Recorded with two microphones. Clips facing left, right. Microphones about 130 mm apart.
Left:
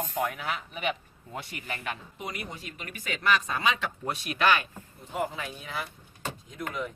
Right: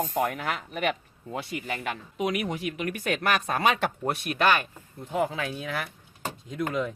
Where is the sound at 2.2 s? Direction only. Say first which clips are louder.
Right 15 dB; 85° right; by 4.7 s 50° right (ahead or behind).